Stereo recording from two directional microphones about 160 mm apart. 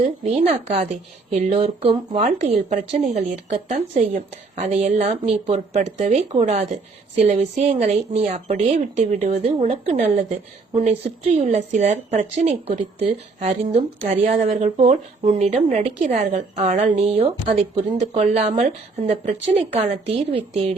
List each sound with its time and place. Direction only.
0.0 s a woman's voice: 40° right (ahead or behind)
10.0 s speech: 50° right (ahead or behind)
16.3 s a woman's voice: 40° right (ahead or behind)